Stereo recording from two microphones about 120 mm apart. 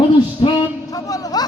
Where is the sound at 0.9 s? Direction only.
30° left (ahead or behind).